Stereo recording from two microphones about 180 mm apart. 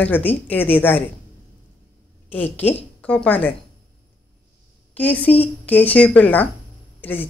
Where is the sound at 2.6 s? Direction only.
10° left (ahead or behind).